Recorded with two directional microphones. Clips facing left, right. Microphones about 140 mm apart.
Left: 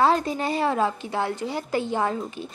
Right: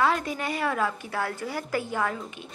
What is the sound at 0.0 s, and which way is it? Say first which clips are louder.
A woman's voice: left 4 dB; 30° left (ahead or behind).